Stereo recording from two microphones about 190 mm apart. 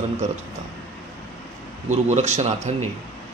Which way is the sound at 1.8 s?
40° right (ahead or behind).